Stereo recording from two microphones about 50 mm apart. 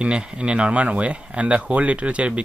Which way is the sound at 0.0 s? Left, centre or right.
Centre.